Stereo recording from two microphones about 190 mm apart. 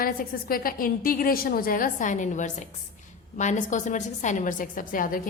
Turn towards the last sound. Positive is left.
turn(degrees=45)  # may be behind; listen again after turning